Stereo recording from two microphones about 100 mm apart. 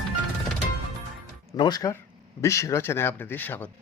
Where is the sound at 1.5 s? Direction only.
45° left (ahead or behind).